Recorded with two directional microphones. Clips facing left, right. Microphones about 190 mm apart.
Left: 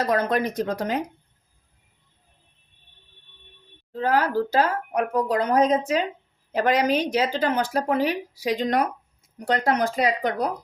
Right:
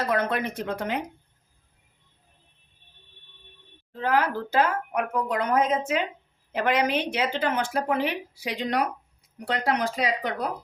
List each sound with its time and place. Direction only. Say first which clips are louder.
0.0 s speech: left 3 dB; 40° left (ahead or behind)
4.0 s speech: left 3 dB; 40° left (ahead or behind)